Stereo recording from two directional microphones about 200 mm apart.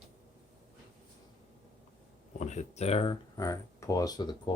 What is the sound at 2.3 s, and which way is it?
Speech, 35° left (ahead or behind).